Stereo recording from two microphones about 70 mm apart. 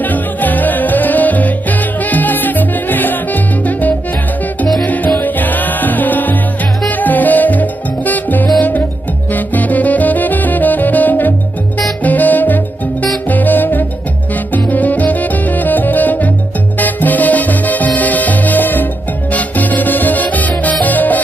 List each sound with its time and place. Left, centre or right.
0.0 s music: left
4.8 s music: left
8.5 s salsa music: left
9.3 s music: left
20.8 s salsa music: left